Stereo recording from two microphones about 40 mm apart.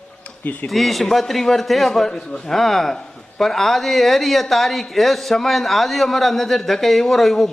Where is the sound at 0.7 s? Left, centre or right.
Centre.